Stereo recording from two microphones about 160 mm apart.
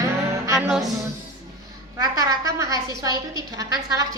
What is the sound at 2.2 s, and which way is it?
A woman's voice, 20° right (ahead or behind).